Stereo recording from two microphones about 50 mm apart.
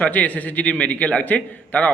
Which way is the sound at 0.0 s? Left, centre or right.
Left.